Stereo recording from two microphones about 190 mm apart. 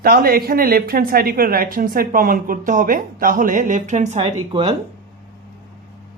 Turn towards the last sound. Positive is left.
turn(degrees=-30)  # may be behind; listen again after turning